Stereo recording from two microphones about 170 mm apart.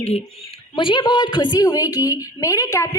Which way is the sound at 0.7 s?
30° left (ahead or behind).